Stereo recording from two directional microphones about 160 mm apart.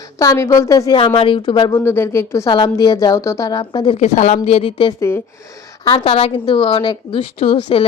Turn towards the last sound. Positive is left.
turn(degrees=35)  # may be behind; listen again after turning